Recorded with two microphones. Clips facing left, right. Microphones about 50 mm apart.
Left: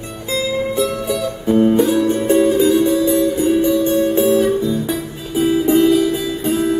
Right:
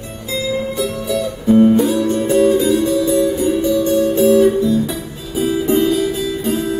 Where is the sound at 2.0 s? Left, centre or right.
Left.